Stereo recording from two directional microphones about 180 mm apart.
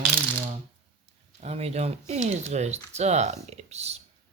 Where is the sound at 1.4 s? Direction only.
35° right (ahead or behind).